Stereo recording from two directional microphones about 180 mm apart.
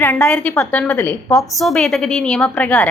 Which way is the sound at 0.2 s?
5° left (ahead or behind).